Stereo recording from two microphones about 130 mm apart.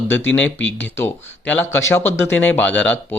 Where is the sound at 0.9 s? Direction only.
15° left (ahead or behind).